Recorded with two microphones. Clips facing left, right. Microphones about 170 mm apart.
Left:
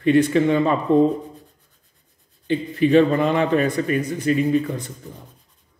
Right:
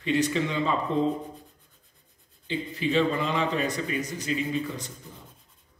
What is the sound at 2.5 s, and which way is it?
A man's voice, 55° left (ahead or behind).